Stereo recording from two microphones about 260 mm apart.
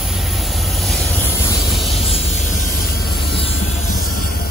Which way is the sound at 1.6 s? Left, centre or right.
Centre.